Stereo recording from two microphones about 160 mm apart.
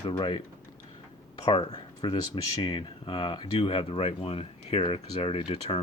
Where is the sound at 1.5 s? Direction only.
30° left (ahead or behind).